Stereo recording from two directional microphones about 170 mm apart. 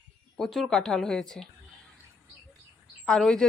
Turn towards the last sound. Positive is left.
turn(degrees=5)  # may be behind; listen again after turning